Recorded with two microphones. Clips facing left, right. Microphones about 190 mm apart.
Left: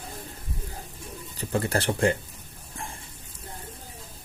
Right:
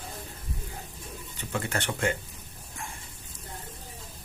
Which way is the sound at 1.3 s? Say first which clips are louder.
Left 6 dB; 35° left (ahead or behind).